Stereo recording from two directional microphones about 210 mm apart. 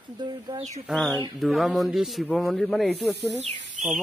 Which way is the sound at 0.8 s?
Centre (ahead or behind).